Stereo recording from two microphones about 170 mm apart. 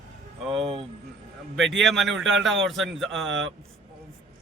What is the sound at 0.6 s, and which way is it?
Speech, 30° right (ahead or behind).